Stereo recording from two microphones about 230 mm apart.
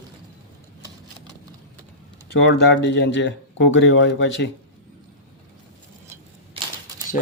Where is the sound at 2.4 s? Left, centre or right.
Left.